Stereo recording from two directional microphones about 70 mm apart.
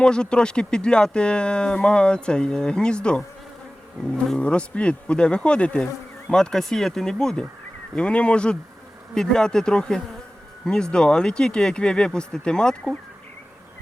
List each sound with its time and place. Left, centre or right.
0.0 s speech: centre
4.3 s speech: centre